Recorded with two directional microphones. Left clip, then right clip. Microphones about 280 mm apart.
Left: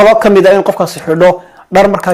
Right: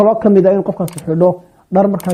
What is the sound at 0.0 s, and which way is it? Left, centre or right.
Speech, centre.